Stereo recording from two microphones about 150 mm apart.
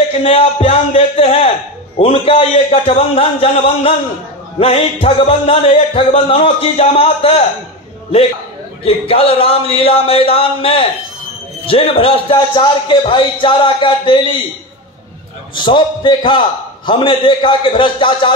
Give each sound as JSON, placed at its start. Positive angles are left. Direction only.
{"t": 0.2, "sound": "a man's voice", "side_deg": 40}
{"t": 4.6, "sound": "music", "side_deg": 45}
{"t": 5.0, "sound": "a man's voice", "side_deg": 40}
{"t": 8.8, "sound": "a man's voice", "side_deg": 40}
{"t": 15.5, "sound": "a man's voice", "side_deg": 30}